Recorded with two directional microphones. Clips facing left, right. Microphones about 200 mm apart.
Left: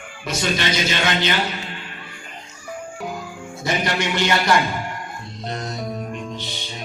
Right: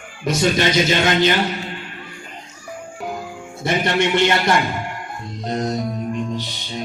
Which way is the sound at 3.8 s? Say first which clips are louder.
Right 6 dB; 25° right (ahead or behind).